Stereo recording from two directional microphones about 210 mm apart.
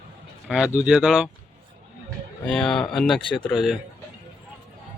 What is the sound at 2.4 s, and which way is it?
Speech, 5° left (ahead or behind).